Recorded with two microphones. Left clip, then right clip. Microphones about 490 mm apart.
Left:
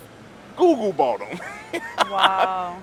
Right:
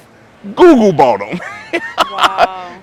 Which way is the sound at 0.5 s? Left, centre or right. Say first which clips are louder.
Right 11 dB; right.